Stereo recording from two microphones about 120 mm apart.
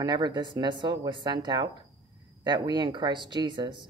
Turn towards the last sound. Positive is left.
turn(degrees=-40)  # may be behind; listen again after turning